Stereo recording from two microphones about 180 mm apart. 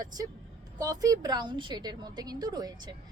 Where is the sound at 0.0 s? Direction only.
20° right (ahead or behind).